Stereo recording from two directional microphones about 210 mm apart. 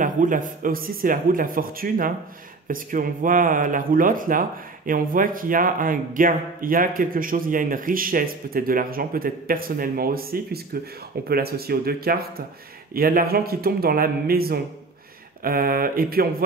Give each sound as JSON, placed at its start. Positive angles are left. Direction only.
{"t": 0.0, "sound": "a man's voice", "side_deg": -40}